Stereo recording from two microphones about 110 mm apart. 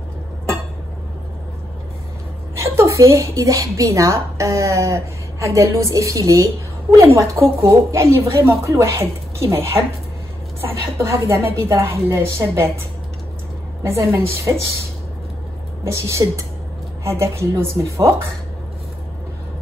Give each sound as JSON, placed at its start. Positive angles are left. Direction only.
{"t": 2.5, "sound": "a woman's voice", "side_deg": -25}
{"t": 13.8, "sound": "a woman's voice", "side_deg": -25}
{"t": 15.8, "sound": "a woman's voice", "side_deg": -25}